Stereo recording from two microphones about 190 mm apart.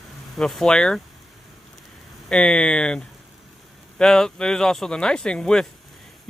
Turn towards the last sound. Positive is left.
turn(degrees=5)  # may be behind; listen again after turning